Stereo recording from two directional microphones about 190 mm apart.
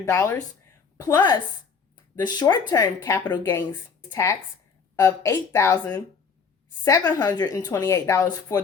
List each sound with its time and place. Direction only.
0.0 s a woman's voice: 15° left (ahead or behind)